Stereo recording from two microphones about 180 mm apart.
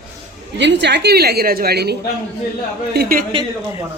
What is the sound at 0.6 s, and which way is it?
A woman's voice, 70° right (ahead or behind).